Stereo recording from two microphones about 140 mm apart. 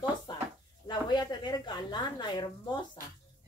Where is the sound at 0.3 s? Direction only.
35° left (ahead or behind).